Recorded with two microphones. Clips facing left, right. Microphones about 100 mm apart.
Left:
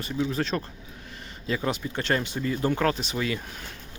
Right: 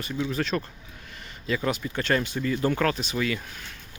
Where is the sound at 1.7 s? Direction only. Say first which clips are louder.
Right 1 dB; 25° left (ahead or behind).